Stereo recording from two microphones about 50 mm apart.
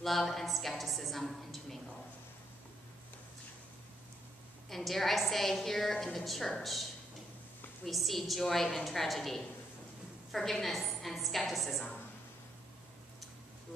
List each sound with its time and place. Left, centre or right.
0.0 s a woman's voice: centre
4.6 s a woman's voice: centre